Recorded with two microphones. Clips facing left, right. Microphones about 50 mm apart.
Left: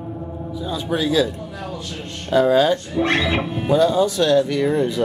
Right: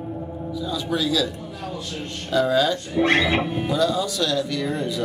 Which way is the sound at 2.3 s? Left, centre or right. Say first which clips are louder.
Left 5 dB; left.